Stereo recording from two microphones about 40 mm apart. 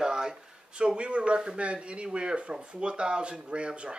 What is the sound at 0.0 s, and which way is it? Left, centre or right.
Speech, centre.